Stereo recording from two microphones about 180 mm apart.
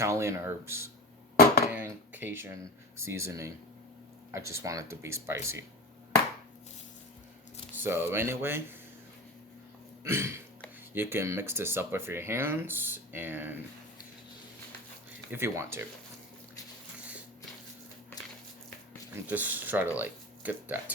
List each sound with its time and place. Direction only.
0.0 s speech: 15° right (ahead or behind)
1.7 s a sound: 10° right (ahead or behind)
3.1 s speech: 15° right (ahead or behind)
7.9 s speech: 15° right (ahead or behind)
10.0 s hiccup: 15° right (ahead or behind)
10.9 s speech: 10° right (ahead or behind)
15.3 s speech: 15° right (ahead or behind)
17.0 s a sound: 5° right (ahead or behind)
18.2 s walk: 20° left (ahead or behind)
19.1 s speech: 10° right (ahead or behind)